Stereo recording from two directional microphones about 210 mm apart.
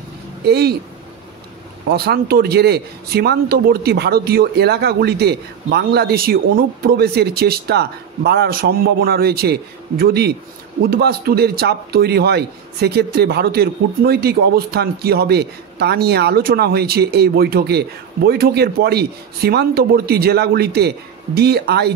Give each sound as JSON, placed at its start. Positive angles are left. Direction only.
{"t": 0.5, "sound": "a man's voice", "side_deg": -50}
{"t": 1.9, "sound": "a man's voice", "side_deg": -50}